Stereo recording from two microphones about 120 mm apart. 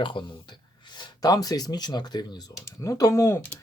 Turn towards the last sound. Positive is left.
turn(degrees=25)  # may be behind; listen again after turning